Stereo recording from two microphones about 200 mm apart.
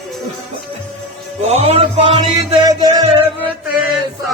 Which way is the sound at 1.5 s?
35° right (ahead or behind).